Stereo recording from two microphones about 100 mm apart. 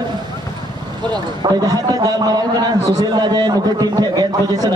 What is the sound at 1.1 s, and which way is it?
A man's voice, 40° right (ahead or behind).